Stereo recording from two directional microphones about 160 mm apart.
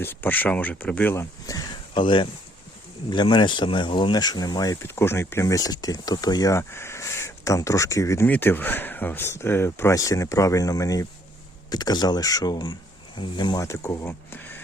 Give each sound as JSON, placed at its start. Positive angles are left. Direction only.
{"t": 0.0, "sound": "speech", "side_deg": 15}